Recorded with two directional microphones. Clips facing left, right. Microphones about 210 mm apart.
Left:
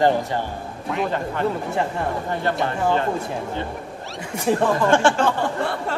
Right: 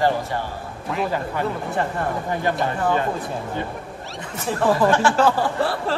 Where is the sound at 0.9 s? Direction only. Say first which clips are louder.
Even; 5° right (ahead or behind).